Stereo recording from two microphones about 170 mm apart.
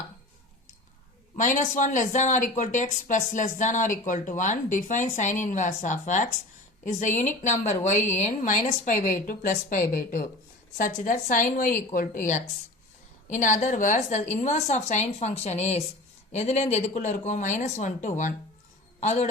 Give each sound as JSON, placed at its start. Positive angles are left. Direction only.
{"t": 1.4, "sound": "a woman's voice", "side_deg": 45}